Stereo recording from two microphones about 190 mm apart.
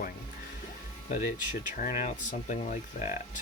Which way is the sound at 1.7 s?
45° left (ahead or behind).